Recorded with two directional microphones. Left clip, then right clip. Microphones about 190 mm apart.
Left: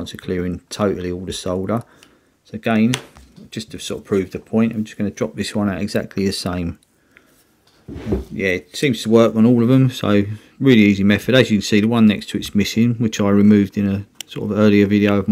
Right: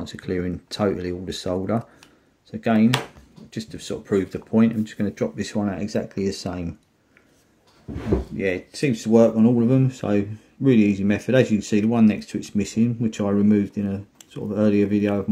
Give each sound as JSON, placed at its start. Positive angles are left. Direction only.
{"t": 0.0, "sound": "speech", "side_deg": 25}
{"t": 8.7, "sound": "speech", "side_deg": 45}